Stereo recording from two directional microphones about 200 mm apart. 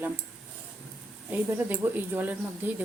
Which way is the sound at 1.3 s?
10° right (ahead or behind).